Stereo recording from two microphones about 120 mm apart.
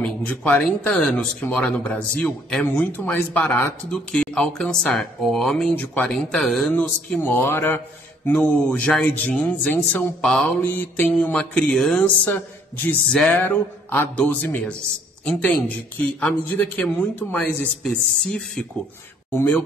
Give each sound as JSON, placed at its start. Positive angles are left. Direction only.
{"t": 0.0, "sound": "speech", "side_deg": 10}
{"t": 6.7, "sound": "speech", "side_deg": 15}